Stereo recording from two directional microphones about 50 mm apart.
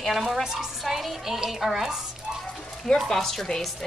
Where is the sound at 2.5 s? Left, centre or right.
Centre.